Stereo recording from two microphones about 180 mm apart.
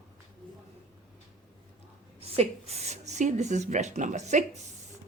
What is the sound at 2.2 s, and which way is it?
Speech, 35° right (ahead or behind).